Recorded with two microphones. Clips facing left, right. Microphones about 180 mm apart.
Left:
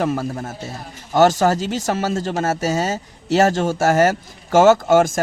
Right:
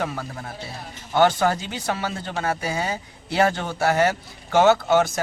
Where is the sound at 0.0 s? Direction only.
40° left (ahead or behind).